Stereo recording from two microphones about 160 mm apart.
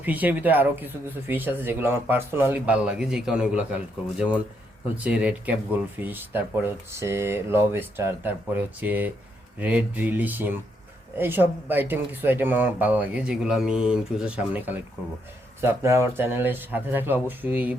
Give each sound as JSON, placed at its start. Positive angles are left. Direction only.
{"t": 0.0, "sound": "speech", "side_deg": -10}
{"t": 5.0, "sound": "speech", "side_deg": -5}